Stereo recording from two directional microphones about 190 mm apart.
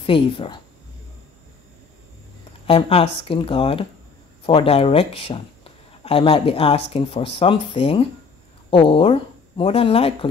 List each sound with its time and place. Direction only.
0.0 s speech: 30° left (ahead or behind)
2.6 s speech: 30° left (ahead or behind)